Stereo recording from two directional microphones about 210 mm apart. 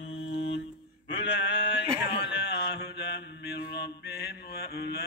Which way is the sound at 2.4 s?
50° left (ahead or behind).